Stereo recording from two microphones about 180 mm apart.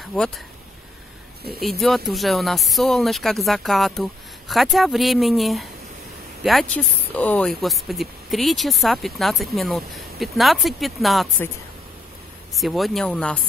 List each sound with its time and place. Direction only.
0.0 s speech: centre (ahead or behind)
1.6 s speech: centre (ahead or behind)
12.5 s speech: centre (ahead or behind)